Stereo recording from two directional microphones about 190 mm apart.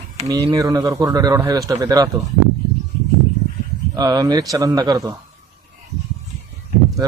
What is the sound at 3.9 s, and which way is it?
Speech, 20° right (ahead or behind).